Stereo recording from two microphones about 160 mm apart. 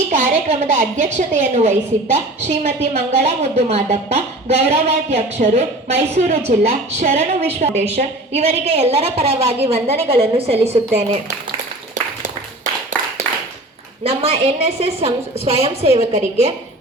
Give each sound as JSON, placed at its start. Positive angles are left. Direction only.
{"t": 0.1, "sound": "a woman's voice", "side_deg": -45}
{"t": 14.0, "sound": "a woman's voice", "side_deg": -40}